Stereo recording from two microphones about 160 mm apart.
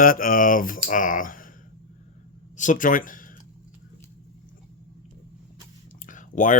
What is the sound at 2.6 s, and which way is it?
Speech, 55° left (ahead or behind).